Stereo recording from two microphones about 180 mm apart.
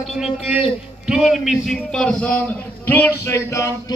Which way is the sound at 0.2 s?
5° right (ahead or behind).